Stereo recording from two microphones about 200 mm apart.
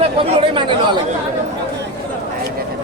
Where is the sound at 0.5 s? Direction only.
25° right (ahead or behind).